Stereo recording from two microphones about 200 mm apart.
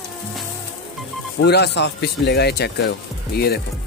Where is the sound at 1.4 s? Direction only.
55° left (ahead or behind).